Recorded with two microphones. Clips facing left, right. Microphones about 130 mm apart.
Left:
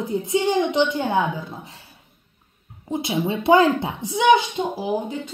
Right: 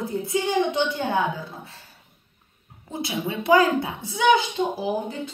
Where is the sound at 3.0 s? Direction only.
25° left (ahead or behind).